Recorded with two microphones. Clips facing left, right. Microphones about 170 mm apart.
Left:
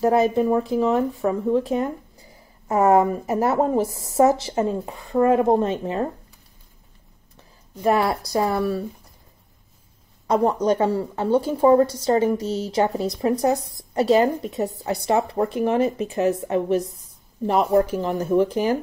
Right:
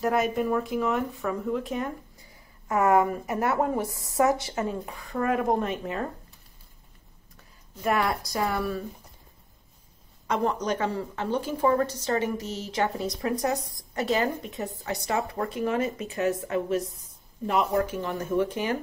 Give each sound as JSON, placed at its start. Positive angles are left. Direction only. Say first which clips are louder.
{"t": 0.0, "sound": "a woman's voice", "louder": "left 7 dB", "side_deg": 30}
{"t": 7.8, "sound": "a woman's voice", "louder": "left 6 dB", "side_deg": 30}
{"t": 10.4, "sound": "a woman's voice", "louder": "left 7 dB", "side_deg": 30}